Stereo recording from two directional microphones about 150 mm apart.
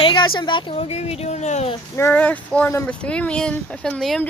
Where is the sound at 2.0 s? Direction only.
10° left (ahead or behind).